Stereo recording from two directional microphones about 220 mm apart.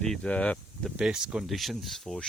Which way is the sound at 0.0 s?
5° left (ahead or behind).